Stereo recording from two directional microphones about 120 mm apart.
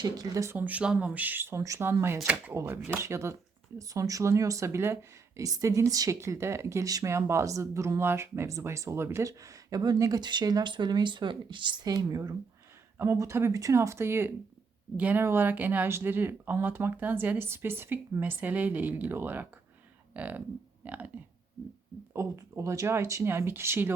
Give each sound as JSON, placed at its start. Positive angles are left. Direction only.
{"t": 0.0, "sound": "speech", "side_deg": -30}
{"t": 0.5, "sound": "speech", "side_deg": -15}
{"t": 22.1, "sound": "speech", "side_deg": -25}